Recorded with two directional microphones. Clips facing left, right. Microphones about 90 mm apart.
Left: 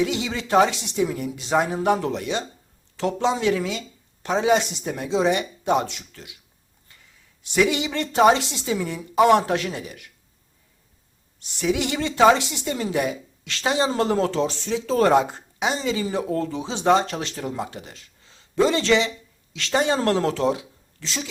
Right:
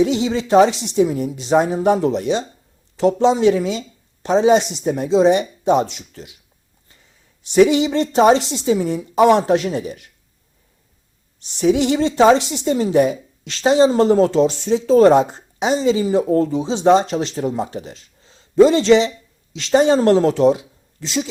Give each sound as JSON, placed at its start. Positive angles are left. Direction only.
{"t": 0.0, "sound": "a woman's voice", "side_deg": -25}
{"t": 7.4, "sound": "a woman's voice", "side_deg": -30}
{"t": 11.3, "sound": "a woman's voice", "side_deg": -30}